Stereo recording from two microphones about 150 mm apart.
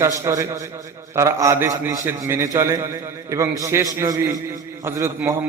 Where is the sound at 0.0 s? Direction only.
20° right (ahead or behind).